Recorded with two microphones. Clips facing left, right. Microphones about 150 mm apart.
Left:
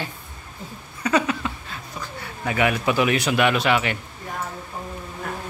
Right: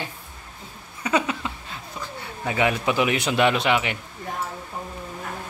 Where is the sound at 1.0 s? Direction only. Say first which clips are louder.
Left 2 dB; 20° right (ahead or behind).